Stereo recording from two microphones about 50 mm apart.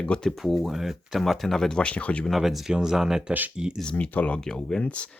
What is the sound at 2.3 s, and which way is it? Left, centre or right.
Speech, centre.